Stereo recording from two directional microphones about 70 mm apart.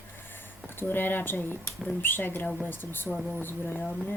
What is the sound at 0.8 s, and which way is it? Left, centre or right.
Speech, left.